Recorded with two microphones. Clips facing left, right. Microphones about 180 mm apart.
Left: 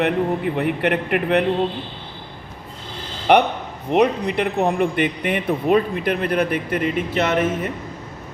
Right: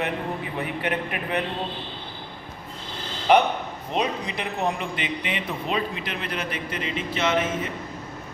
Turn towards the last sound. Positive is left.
turn(degrees=55)  # may be behind; listen again after turning